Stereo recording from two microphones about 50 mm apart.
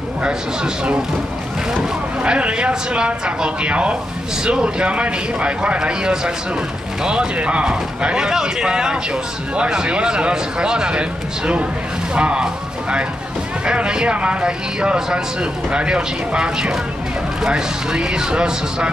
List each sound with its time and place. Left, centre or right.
1.8 s speech: right
13.7 s speech: centre